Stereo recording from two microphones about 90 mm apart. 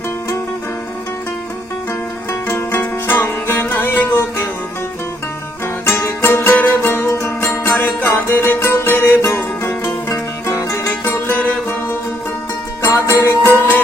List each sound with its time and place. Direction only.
2.5 s music: 25° left (ahead or behind)
6.0 s music: 25° left (ahead or behind)
10.8 s music: 20° left (ahead or behind)
12.8 s music: 30° left (ahead or behind)